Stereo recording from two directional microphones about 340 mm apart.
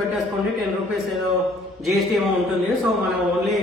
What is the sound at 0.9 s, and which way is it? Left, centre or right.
A man's voice, centre.